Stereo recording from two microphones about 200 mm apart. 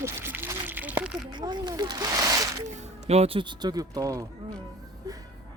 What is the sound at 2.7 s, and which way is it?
Speech, 30° right (ahead or behind).